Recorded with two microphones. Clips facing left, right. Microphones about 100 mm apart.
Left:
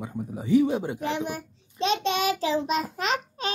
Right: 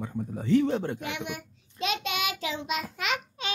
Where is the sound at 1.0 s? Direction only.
35° left (ahead or behind).